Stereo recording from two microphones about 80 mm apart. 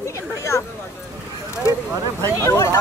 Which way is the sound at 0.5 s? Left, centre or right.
Left.